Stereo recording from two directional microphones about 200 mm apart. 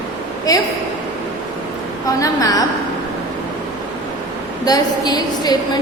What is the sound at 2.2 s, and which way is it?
Speech, 15° left (ahead or behind).